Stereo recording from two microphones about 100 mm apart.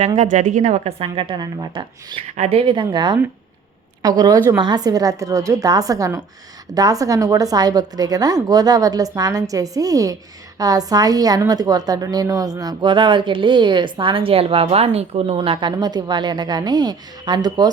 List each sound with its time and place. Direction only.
0.7 s a woman's voice: 80° right; by 17.7 s 45° right (ahead or behind)